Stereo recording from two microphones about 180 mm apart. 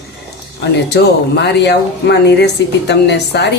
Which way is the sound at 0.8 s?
70° left (ahead or behind).